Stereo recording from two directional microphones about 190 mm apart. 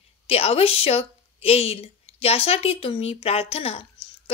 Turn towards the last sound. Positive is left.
turn(degrees=30)  # may be behind; listen again after turning